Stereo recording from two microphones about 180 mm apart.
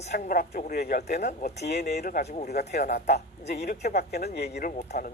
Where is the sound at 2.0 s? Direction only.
50° left (ahead or behind).